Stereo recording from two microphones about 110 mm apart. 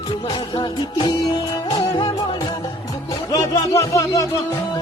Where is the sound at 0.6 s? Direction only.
40° left (ahead or behind).